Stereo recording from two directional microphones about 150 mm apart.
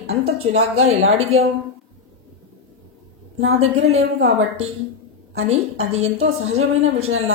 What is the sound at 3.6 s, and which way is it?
Speech, 45° right (ahead or behind).